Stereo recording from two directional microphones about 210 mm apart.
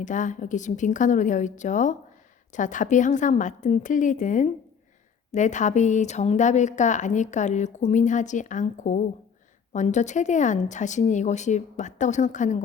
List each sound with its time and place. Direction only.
0.0 s speech: 35° left (ahead or behind)